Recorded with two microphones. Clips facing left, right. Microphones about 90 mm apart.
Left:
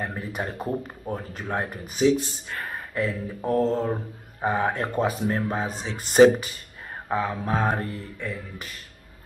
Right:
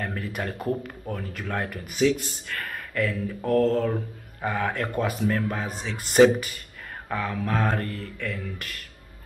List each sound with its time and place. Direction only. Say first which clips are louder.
0.0 s speech: even; 20° left (ahead or behind)